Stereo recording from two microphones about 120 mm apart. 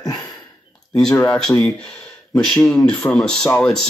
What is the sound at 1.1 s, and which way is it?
Speech, 10° left (ahead or behind).